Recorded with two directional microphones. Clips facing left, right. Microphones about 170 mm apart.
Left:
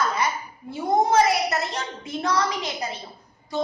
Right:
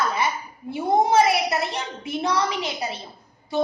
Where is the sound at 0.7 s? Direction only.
20° right (ahead or behind).